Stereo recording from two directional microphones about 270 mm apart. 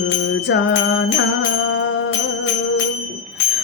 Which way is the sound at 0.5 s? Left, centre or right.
Left.